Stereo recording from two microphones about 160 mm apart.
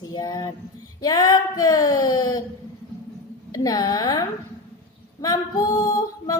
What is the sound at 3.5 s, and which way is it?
Speech, 20° left (ahead or behind).